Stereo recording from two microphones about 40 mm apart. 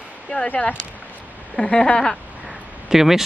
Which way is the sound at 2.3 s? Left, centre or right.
Right.